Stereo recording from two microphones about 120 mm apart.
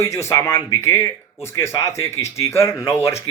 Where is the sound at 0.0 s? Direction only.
25° left (ahead or behind).